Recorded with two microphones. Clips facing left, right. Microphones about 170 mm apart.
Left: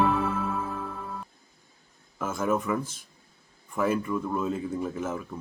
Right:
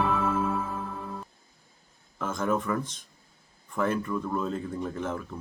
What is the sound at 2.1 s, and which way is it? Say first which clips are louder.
Speech: left 1 dB; 5° left (ahead or behind).